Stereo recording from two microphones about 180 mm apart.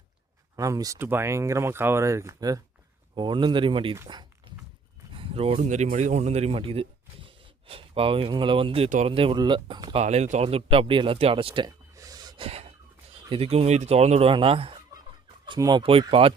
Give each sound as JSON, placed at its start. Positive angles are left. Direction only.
{"t": 0.5, "sound": "speech", "side_deg": -20}
{"t": 5.1, "sound": "speech", "side_deg": -30}
{"t": 12.5, "sound": "a sound", "side_deg": -35}
{"t": 13.3, "sound": "speech", "side_deg": -35}